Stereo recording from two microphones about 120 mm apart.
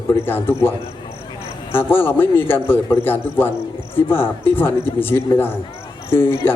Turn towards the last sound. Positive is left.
turn(degrees=20)  # may be behind; listen again after turning